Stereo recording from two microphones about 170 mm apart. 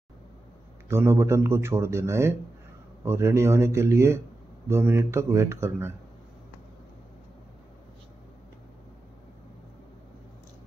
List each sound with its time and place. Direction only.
0.8 s speech: 15° right (ahead or behind)